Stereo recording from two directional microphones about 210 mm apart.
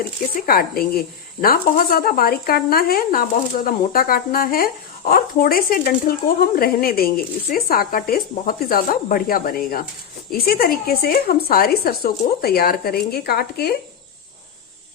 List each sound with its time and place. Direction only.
0.4 s speech: 45° left (ahead or behind)